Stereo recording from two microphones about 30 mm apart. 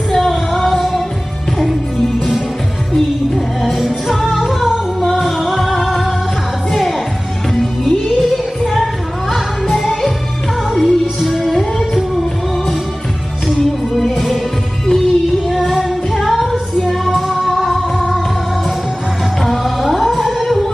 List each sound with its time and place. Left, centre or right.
0.1 s female singing: centre
3.3 s music: centre
7.5 s music: centre
13.6 s music: centre
15.5 s music: centre
16.1 s music: centre
19.4 s music: centre